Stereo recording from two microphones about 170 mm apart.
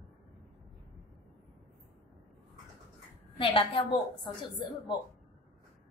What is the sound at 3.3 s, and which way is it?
A woman's voice, 30° left (ahead or behind).